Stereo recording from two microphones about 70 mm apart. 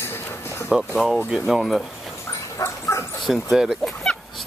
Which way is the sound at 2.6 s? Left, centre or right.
Left.